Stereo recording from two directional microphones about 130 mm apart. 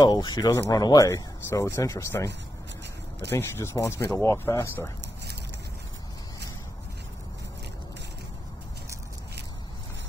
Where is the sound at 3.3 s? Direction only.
20° left (ahead or behind).